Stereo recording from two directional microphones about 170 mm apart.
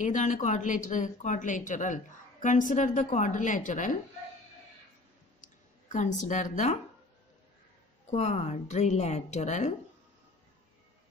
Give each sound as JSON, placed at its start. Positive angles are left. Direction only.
{"t": 0.0, "sound": "speech", "side_deg": 45}
{"t": 5.4, "sound": "speech", "side_deg": 45}
{"t": 8.1, "sound": "a woman's voice", "side_deg": 40}